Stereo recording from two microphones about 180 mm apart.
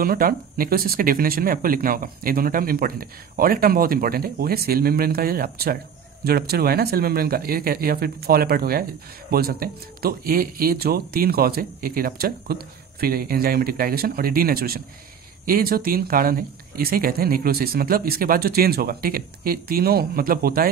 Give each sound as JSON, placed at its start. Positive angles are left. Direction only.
{"t": 0.0, "sound": "speech", "side_deg": -55}